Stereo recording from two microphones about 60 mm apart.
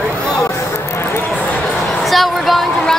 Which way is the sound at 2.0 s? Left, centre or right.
Centre.